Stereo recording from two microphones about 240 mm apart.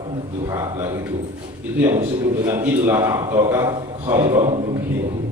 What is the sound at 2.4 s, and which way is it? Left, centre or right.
A man's voice, centre.